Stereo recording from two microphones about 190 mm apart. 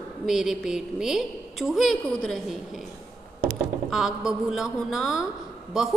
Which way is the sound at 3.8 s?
5° right (ahead or behind).